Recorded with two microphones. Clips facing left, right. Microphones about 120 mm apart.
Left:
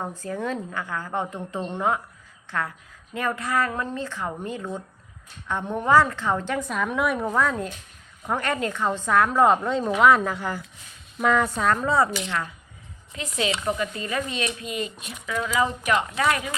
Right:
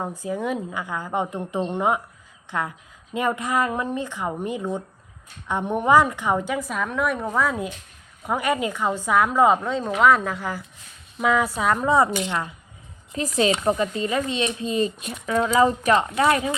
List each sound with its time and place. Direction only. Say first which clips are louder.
0.0 s a woman's voice: right 2 dB; 10° right (ahead or behind)
13.1 s speech: right 6 dB; 40° right (ahead or behind)